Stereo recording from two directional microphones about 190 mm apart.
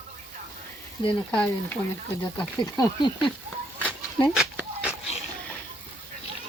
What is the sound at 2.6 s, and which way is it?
Speech, 25° left (ahead or behind).